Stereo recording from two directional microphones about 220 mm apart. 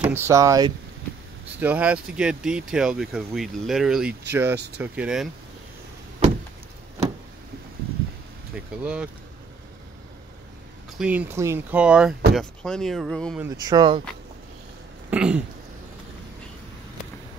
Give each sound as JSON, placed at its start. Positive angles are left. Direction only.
{"t": 0.0, "sound": "speech", "side_deg": -10}
{"t": 8.5, "sound": "speech", "side_deg": -5}
{"t": 11.0, "sound": "speech", "side_deg": -5}
{"t": 13.4, "sound": "speech", "side_deg": -15}
{"t": 15.0, "sound": "throat clearing", "side_deg": -5}